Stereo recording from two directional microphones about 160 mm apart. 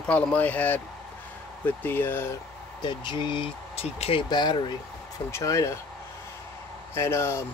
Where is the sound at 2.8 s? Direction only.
30° left (ahead or behind).